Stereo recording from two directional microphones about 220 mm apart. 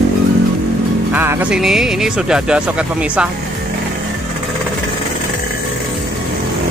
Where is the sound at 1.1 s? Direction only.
10° right (ahead or behind).